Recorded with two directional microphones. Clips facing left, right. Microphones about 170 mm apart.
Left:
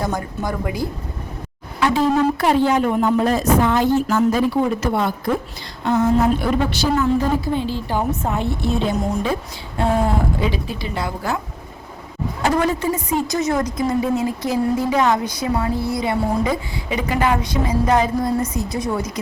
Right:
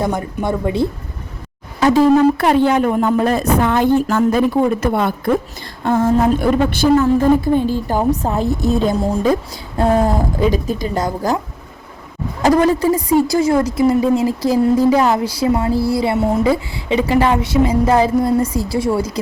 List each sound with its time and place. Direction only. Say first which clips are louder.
0.0 s a woman's voice: right 4 dB; 20° right (ahead or behind)
2.4 s a woman's voice: right 3 dB; 60° right (ahead or behind); by 11.3 s 40° right (ahead or behind)
12.4 s a woman's voice: right 6 dB; 35° right (ahead or behind)